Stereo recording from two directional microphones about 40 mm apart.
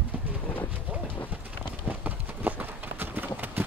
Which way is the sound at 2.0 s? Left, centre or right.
Right.